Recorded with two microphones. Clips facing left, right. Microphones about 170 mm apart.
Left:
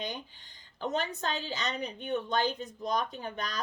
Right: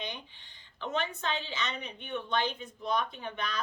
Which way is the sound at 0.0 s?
40° left (ahead or behind).